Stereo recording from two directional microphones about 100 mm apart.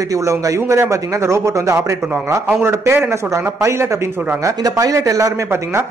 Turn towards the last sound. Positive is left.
turn(degrees=-30)  # may be behind; listen again after turning